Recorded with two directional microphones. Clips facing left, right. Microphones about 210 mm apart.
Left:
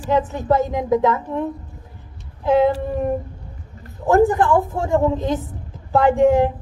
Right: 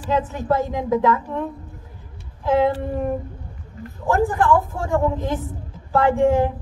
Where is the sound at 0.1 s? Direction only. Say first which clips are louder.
Left 3 dB; 20° left (ahead or behind).